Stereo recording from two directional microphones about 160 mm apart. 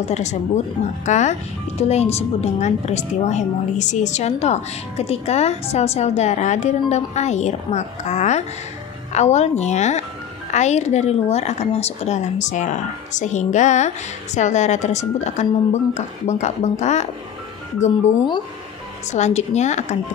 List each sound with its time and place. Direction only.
0.1 s a woman's voice: 45° left (ahead or behind)
19.1 s a woman's voice: 45° left (ahead or behind)